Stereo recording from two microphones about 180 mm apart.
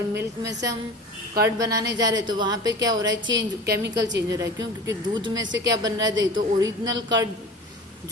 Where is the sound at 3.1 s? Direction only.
90° right; by 3.9 s 70° right (ahead or behind).